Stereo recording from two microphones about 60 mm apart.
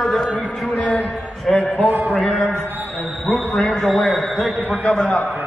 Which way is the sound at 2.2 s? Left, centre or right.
Centre.